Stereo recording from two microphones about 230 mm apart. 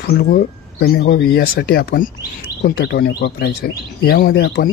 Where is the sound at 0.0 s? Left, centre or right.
Left.